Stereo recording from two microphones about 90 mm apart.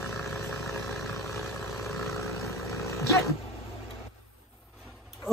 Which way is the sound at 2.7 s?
35° left (ahead or behind).